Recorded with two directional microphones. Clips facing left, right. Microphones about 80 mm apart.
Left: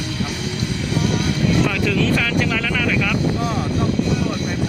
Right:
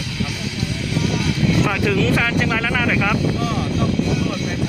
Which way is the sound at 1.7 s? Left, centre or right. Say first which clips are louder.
Right 1 dB; centre.